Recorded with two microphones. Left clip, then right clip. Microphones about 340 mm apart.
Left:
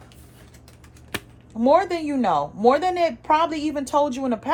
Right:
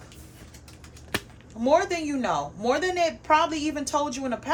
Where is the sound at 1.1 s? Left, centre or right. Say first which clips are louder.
Right 1 dB; centre.